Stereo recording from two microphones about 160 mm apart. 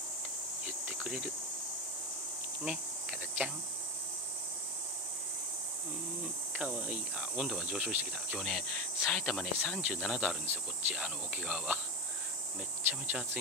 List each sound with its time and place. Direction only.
0.8 s insect: 10° right (ahead or behind)
2.6 s insect: 5° right (ahead or behind)
6.5 s speech: 10° right (ahead or behind)
13.0 s speech: 10° right (ahead or behind)